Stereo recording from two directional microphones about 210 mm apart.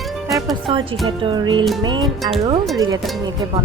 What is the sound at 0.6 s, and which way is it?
Speech, 25° right (ahead or behind).